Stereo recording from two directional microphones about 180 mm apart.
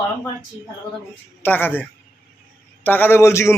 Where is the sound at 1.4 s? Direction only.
10° left (ahead or behind).